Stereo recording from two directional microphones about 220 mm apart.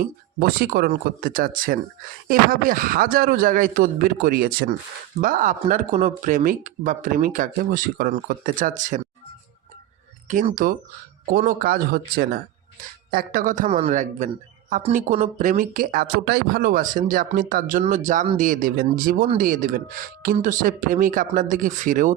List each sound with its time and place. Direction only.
0.0 s speech: 45° right (ahead or behind)
10.2 s speech: 35° right (ahead or behind)